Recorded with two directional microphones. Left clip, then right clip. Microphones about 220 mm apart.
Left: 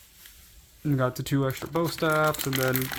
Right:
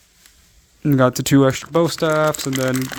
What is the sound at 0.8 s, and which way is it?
Speech, 55° right (ahead or behind).